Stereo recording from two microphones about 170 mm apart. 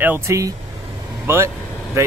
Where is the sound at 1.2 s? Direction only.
15° right (ahead or behind).